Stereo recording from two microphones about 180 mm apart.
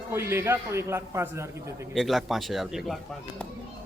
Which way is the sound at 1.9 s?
Centre (ahead or behind).